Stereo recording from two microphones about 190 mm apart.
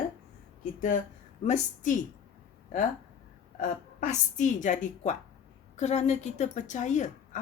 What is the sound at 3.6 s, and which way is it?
A woman's voice, 40° left (ahead or behind).